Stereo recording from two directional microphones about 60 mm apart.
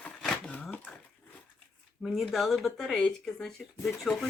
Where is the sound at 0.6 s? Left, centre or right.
Left.